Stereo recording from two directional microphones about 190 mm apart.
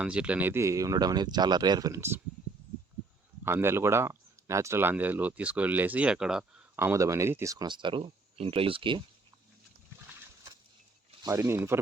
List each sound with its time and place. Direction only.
0.0 s speech: 5° right (ahead or behind)
3.4 s speech: 10° right (ahead or behind)
6.7 s speech: 15° right (ahead or behind)
11.2 s speech: 15° right (ahead or behind)